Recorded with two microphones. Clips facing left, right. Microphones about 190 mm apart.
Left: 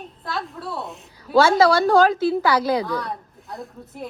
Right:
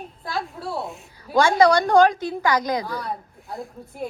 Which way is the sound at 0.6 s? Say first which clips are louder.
Right 1 dB; 30° right (ahead or behind).